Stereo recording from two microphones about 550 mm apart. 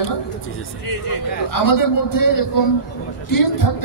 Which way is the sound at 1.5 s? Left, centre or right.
Left.